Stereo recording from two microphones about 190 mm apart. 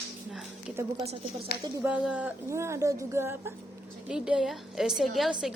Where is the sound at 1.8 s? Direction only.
5° right (ahead or behind).